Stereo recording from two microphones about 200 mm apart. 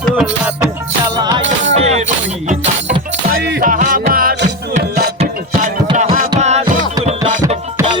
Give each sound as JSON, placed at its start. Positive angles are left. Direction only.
{"t": 0.0, "sound": "music", "side_deg": 0}
{"t": 1.1, "sound": "music", "side_deg": -20}
{"t": 1.8, "sound": "music", "side_deg": -35}
{"t": 3.3, "sound": "music", "side_deg": -50}
{"t": 5.2, "sound": "music", "side_deg": -35}